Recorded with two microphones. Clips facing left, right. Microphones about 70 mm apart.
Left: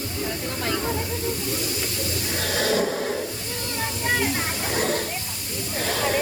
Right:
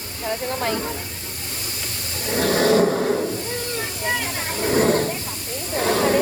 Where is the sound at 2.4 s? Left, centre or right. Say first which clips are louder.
Right 8 dB; right.